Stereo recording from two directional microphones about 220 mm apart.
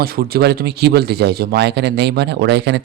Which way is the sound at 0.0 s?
45° right (ahead or behind).